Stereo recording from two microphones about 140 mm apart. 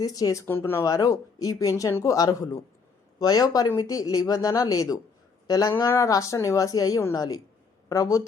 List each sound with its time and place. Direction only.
0.0 s speech: 25° left (ahead or behind)